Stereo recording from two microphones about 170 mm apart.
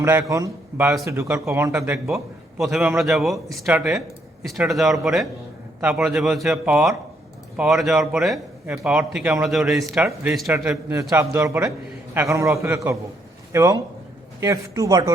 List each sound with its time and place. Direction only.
0.0 s a man's voice: 15° right (ahead or behind)
2.0 s a man's voice: centre (ahead or behind)
10.7 s a man's voice: 15° right (ahead or behind)